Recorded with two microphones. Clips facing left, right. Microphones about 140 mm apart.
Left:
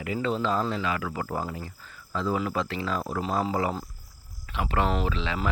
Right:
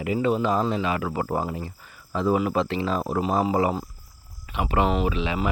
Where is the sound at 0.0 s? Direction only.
15° right (ahead or behind).